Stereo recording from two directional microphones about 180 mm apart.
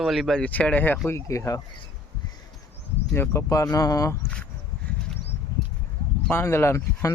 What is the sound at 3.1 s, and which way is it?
Speech, 15° left (ahead or behind).